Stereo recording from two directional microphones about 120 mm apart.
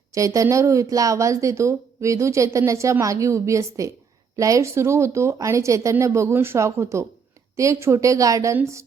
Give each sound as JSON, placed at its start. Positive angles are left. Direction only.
{"t": 0.1, "sound": "a woman's voice", "side_deg": -25}